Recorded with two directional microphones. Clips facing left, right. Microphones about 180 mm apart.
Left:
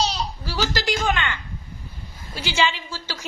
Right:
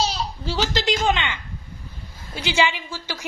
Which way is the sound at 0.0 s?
10° right (ahead or behind).